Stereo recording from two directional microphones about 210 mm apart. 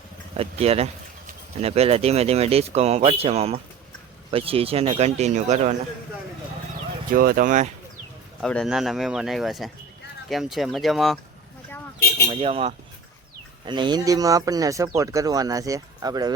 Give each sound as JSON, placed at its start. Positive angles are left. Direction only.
{"t": 0.3, "sound": "speech", "side_deg": -30}
{"t": 7.2, "sound": "speech", "side_deg": -45}
{"t": 8.4, "sound": "speech", "side_deg": 0}
{"t": 12.3, "sound": "speech", "side_deg": -25}